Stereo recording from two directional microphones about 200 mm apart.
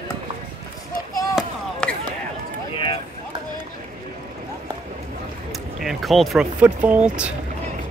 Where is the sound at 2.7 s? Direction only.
25° left (ahead or behind).